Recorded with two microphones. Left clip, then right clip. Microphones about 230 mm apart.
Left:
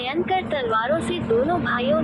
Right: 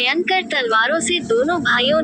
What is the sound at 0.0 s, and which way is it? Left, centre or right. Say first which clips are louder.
A woman's voice: right 6 dB; right.